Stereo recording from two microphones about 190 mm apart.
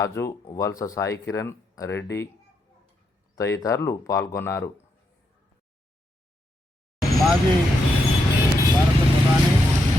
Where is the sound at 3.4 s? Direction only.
15° left (ahead or behind).